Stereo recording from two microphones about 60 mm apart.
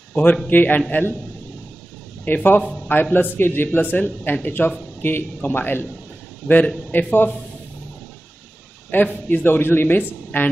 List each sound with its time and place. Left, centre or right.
0.1 s a man's voice: left
2.2 s a man's voice: left
6.4 s a man's voice: centre
6.9 s a man's voice: left
8.9 s a man's voice: left